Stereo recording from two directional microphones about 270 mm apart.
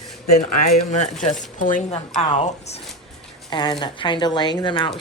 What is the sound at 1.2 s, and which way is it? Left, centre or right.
Speech, left.